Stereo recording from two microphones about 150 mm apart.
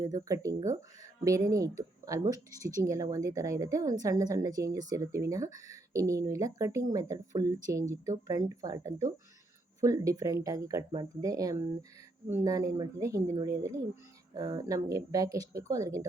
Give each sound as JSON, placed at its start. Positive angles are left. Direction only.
{"t": 0.0, "sound": "speech", "side_deg": -25}